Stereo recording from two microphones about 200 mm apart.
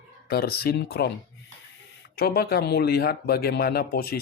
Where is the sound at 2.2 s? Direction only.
50° left (ahead or behind).